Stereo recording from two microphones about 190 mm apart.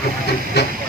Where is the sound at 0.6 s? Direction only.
60° left (ahead or behind).